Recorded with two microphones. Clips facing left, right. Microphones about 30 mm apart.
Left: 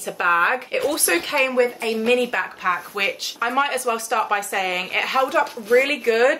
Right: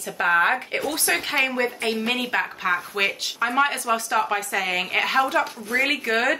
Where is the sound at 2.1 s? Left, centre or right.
Centre.